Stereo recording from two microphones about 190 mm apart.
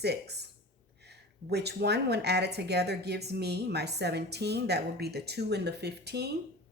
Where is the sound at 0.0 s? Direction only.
60° right (ahead or behind).